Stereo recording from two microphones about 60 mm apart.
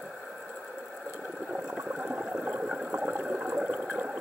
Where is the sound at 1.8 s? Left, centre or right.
Right.